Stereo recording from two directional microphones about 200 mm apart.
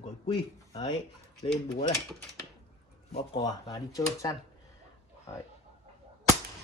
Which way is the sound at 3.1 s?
25° left (ahead or behind).